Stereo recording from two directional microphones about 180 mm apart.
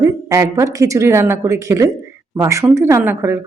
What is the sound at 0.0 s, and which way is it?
Speech, 15° right (ahead or behind).